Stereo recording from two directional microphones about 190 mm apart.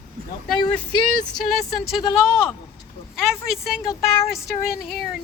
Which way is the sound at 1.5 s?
Centre (ahead or behind).